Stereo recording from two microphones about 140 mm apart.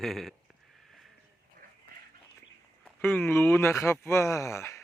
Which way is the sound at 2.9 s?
15° left (ahead or behind).